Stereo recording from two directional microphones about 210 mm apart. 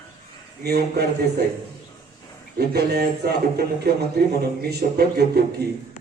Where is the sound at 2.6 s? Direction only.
50° right (ahead or behind).